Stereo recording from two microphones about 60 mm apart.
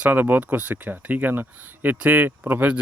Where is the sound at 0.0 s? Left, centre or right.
Right.